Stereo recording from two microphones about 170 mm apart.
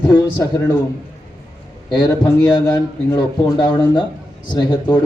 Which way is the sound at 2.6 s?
25° left (ahead or behind).